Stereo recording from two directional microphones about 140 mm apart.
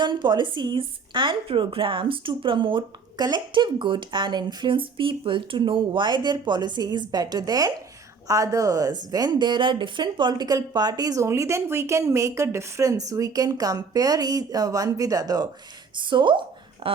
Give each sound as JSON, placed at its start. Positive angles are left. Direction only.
{"t": 0.0, "sound": "a woman's voice", "side_deg": -35}